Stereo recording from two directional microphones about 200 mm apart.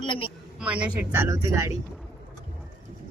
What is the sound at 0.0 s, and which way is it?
Speech, 25° left (ahead or behind).